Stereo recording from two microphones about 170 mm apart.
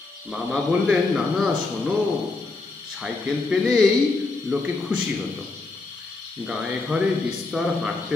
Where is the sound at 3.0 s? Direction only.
Centre (ahead or behind).